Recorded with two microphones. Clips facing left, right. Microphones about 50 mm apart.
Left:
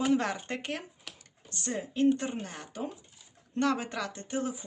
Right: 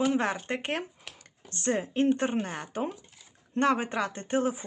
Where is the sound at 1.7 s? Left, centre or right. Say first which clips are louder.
Even; right.